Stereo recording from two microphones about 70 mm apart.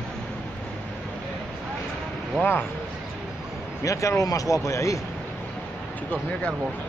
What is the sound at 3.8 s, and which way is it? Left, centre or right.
Speech, left.